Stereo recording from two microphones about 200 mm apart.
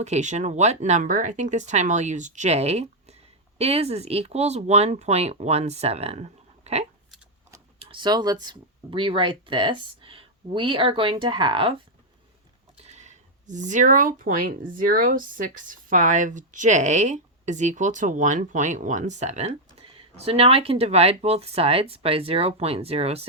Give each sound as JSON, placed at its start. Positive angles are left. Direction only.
{"t": 0.0, "sound": "speech", "side_deg": -35}
{"t": 12.8, "sound": "speech", "side_deg": -35}